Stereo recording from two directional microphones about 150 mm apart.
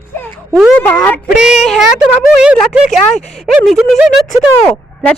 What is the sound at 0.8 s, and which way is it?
Speech, 15° left (ahead or behind).